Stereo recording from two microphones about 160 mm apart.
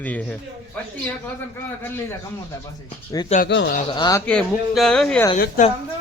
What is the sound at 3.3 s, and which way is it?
Speech, 45° left (ahead or behind).